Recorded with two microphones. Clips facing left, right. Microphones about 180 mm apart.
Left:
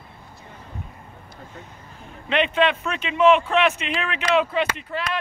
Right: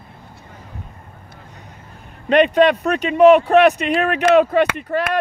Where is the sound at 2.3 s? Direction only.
40° right (ahead or behind).